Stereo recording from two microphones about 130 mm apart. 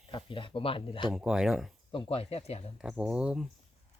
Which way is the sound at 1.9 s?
45° left (ahead or behind).